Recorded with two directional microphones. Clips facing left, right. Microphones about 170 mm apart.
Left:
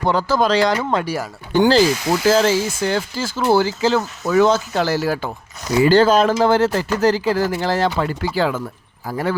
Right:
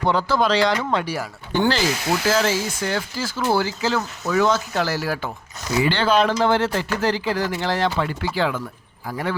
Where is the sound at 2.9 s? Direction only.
25° left (ahead or behind).